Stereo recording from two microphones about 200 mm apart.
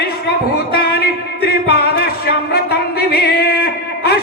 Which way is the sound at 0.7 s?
50° left (ahead or behind).